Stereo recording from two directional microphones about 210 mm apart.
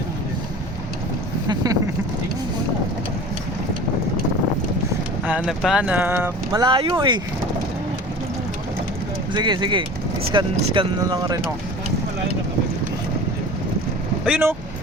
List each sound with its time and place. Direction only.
1.5 s a sound: 15° right (ahead or behind)
5.2 s speech: 5° right (ahead or behind); by 7.2 s 20° right (ahead or behind)
9.3 s speech: 20° right (ahead or behind)
14.3 s speech: 5° right (ahead or behind)